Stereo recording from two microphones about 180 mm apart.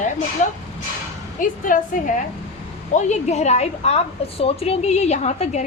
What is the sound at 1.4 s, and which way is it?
A woman's voice, 45° left (ahead or behind).